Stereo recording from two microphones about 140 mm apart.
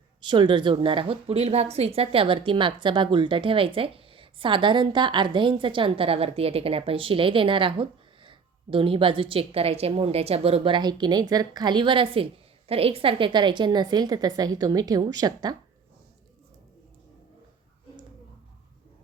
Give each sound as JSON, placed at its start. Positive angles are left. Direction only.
{"t": 0.2, "sound": "a woman's voice", "side_deg": -35}